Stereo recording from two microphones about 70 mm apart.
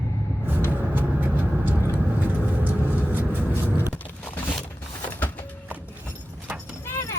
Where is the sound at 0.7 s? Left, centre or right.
Right.